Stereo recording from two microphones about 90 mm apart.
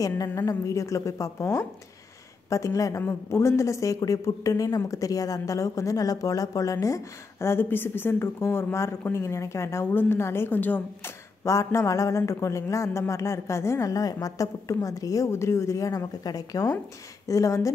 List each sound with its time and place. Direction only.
0.0 s a woman's voice: 40° left (ahead or behind); by 11.1 s 20° left (ahead or behind)
11.4 s a woman's voice: 35° left (ahead or behind)